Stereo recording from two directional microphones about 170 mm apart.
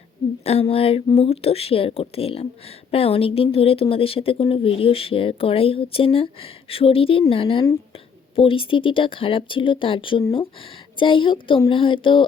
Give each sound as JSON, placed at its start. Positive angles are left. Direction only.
{"t": 0.4, "sound": "speech", "side_deg": 35}